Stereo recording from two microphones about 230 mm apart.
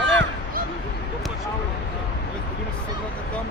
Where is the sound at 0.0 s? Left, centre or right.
Right.